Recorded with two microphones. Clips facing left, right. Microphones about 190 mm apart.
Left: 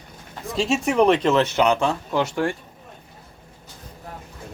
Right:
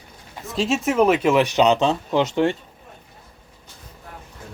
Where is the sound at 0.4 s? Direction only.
Centre (ahead or behind); by 2.6 s 20° right (ahead or behind).